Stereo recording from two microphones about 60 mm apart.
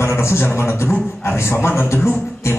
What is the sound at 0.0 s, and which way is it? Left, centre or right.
A man's voice, left.